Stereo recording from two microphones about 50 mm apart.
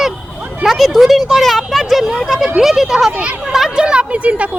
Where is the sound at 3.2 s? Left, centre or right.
Right.